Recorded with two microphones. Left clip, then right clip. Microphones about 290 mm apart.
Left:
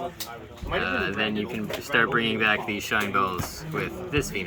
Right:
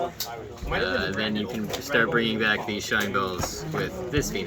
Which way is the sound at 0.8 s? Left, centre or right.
Centre.